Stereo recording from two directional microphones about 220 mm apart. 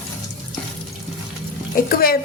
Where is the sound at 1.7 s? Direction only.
40° left (ahead or behind).